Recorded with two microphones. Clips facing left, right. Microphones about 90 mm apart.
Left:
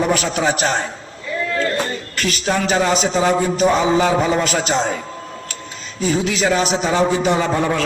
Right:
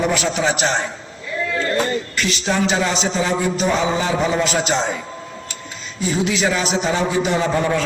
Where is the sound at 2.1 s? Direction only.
45° left (ahead or behind).